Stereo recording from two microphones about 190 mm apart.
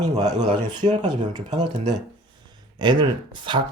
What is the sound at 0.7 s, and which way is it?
Speech, 20° right (ahead or behind).